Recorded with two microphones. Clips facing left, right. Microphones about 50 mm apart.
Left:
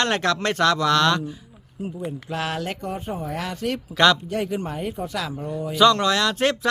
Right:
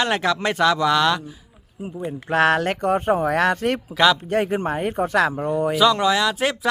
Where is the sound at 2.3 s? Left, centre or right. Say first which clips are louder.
Right 11 dB; right.